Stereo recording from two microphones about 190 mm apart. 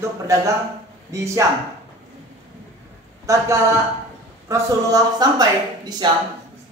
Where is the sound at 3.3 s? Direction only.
15° right (ahead or behind).